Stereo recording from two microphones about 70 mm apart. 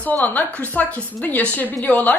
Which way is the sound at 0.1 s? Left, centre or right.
Left.